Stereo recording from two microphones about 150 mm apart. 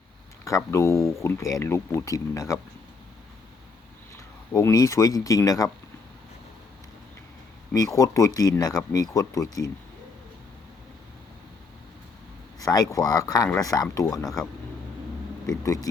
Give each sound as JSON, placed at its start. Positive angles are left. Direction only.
{"t": 0.4, "sound": "speech", "side_deg": 20}
{"t": 4.5, "sound": "speech", "side_deg": 20}
{"t": 7.9, "sound": "speech", "side_deg": 25}
{"t": 12.5, "sound": "speech", "side_deg": 25}
{"t": 14.2, "sound": "speech", "side_deg": 0}
{"t": 15.4, "sound": "speech", "side_deg": 25}